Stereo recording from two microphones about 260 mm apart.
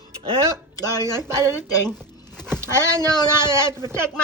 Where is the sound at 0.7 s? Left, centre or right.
Centre.